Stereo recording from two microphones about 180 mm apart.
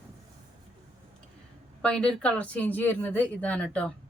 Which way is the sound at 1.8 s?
5° left (ahead or behind).